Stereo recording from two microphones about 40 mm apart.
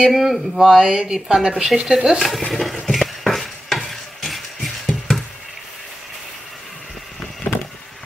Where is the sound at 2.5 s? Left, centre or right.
Centre.